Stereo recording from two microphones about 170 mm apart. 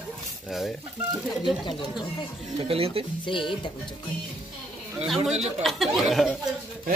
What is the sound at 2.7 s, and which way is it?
Speech, 35° right (ahead or behind).